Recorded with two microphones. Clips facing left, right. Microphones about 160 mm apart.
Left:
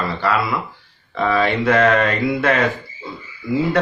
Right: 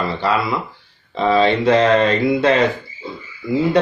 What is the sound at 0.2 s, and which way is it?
Speech, 25° right (ahead or behind).